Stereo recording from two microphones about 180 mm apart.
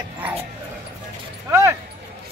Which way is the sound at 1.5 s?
15° right (ahead or behind).